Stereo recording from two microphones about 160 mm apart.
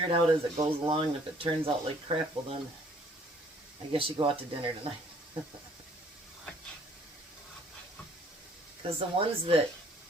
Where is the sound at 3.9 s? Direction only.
35° right (ahead or behind).